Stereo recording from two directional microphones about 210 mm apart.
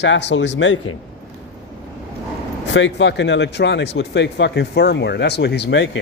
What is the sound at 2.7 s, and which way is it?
Speech, 60° left (ahead or behind).